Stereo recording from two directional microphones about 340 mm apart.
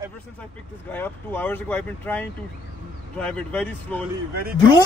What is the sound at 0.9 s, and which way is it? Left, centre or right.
Speech, centre.